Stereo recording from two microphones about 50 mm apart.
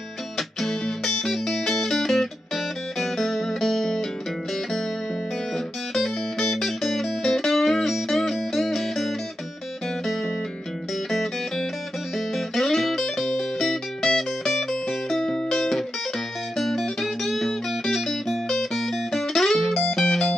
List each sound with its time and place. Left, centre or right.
0.4 s music: centre
5.9 s music: centre
11.1 s music: centre